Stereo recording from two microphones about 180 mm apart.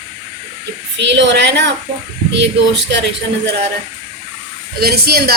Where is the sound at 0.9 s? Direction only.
75° right (ahead or behind).